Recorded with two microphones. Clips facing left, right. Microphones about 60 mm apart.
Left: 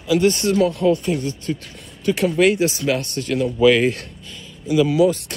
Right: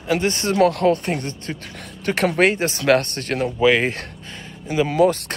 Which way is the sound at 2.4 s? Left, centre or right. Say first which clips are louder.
Left 3 dB; right.